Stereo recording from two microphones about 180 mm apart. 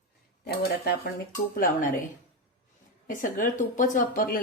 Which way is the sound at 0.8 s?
60° left (ahead or behind).